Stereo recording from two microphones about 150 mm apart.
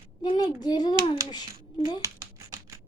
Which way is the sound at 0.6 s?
30° left (ahead or behind).